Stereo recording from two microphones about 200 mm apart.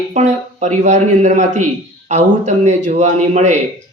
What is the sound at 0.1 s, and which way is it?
A man's voice, 35° right (ahead or behind).